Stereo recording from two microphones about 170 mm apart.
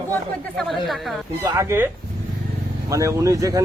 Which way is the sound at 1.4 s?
20° right (ahead or behind).